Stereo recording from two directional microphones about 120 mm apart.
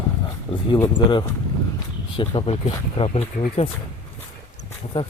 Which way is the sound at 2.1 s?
45° left (ahead or behind).